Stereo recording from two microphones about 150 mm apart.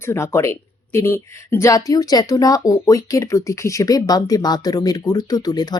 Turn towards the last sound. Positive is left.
turn(degrees=25)  # may be behind; listen again after turning